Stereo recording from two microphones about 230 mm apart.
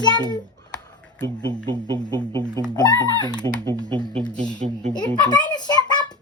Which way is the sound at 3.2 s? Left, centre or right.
Centre.